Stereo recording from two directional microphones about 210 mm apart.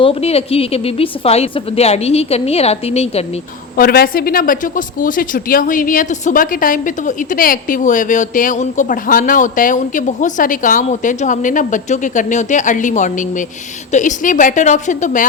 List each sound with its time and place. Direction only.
0.0 s a woman's voice: 30° left (ahead or behind)
3.8 s a woman's voice: 45° left (ahead or behind)